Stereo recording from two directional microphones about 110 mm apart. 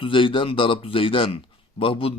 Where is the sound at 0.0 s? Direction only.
50° left (ahead or behind).